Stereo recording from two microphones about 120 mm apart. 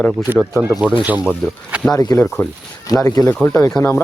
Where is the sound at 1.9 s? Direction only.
30° left (ahead or behind).